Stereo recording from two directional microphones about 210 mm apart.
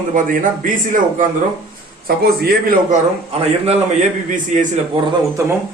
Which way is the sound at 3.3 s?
30° right (ahead or behind).